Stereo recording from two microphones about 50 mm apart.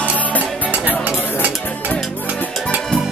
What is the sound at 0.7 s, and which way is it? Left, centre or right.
Music, right.